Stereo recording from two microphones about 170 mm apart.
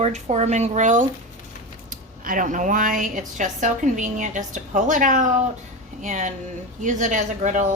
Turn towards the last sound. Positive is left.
turn(degrees=-45)  # may be behind; listen again after turning